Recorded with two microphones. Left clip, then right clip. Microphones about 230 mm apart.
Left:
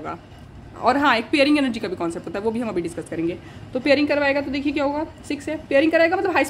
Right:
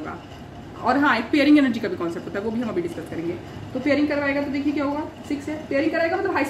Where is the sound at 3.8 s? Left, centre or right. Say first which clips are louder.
Left 3 dB; left.